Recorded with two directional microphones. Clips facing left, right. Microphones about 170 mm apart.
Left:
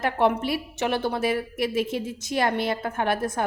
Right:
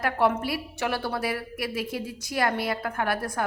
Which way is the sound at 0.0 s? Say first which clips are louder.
Left 2 dB; 25° left (ahead or behind).